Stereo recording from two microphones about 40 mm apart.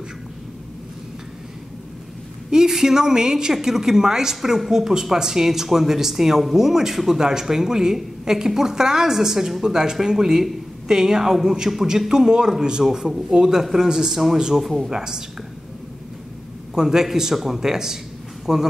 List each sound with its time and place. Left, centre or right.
2.5 s a woman's voice: centre
14.9 s a woman's voice: centre
16.7 s a woman's voice: centre